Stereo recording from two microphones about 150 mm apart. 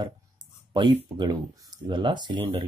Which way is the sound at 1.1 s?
30° right (ahead or behind).